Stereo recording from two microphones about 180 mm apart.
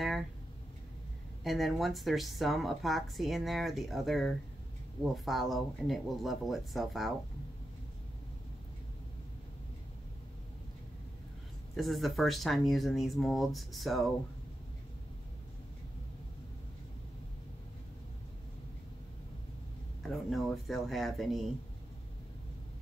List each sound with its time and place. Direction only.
1.4 s a woman's voice: centre (ahead or behind)
11.7 s a woman's voice: centre (ahead or behind)
20.0 s a woman's voice: centre (ahead or behind)